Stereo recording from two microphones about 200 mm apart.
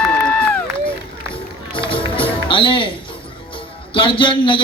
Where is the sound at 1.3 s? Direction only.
25° left (ahead or behind).